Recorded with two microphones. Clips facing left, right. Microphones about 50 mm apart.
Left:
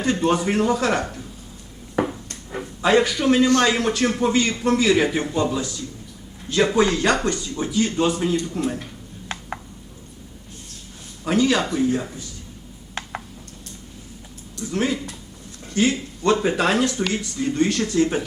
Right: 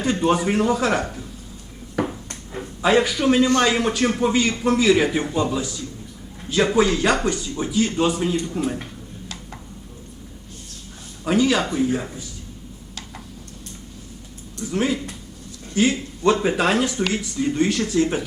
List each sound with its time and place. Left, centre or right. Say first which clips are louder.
0.0 s speech: even; centre
2.8 s speech: even; centre
3.4 s speech: left 2 dB; centre
3.7 s speech: even; centre
11.3 s speech: even; centre
14.6 s speech: right 1 dB; centre